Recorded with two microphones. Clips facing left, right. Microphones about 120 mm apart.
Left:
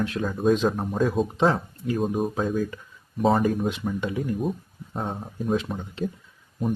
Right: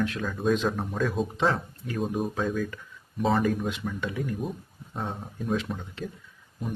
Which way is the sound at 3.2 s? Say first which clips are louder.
Left 3 dB; 45° left (ahead or behind).